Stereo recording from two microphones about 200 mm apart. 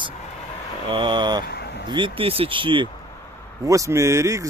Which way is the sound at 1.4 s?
55° left (ahead or behind).